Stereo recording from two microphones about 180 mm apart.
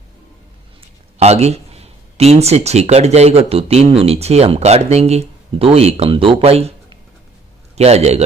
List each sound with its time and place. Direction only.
0.8 s a man's voice: 35° right (ahead or behind)